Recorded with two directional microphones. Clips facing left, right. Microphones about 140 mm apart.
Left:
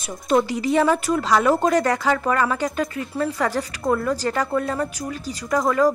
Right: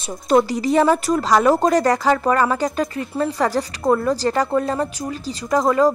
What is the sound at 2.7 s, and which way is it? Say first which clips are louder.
Speech: right 2 dB; 25° right (ahead or behind).